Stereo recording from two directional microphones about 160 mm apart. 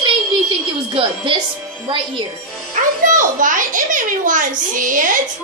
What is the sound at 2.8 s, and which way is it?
A child's voice, 55° right (ahead or behind).